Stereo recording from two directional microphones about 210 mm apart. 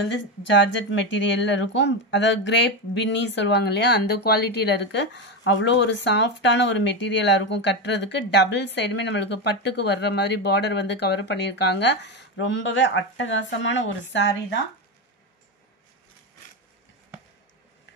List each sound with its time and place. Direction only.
0.1 s speech: 60° left (ahead or behind)